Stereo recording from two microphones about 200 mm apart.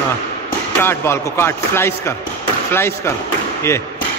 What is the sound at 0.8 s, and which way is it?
Speech, 10° left (ahead or behind).